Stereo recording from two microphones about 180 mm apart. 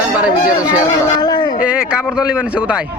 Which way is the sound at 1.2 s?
25° left (ahead or behind).